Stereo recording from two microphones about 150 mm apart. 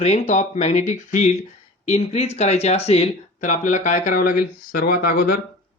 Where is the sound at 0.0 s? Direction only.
50° left (ahead or behind); by 5.4 s 80° left.